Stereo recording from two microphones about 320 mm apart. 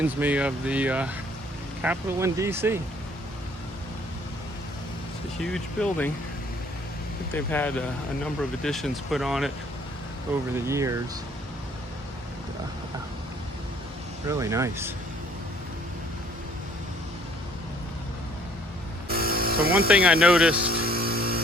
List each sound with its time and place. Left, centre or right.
0.0 s speech: centre
5.4 s speech: centre
7.3 s speech: centre
10.5 s speech: centre
14.3 s speech: centre
19.0 s vehicle: right
19.9 s speech: centre
20.7 s a sound: right